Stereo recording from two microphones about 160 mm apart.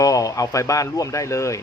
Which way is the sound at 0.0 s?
20° left (ahead or behind).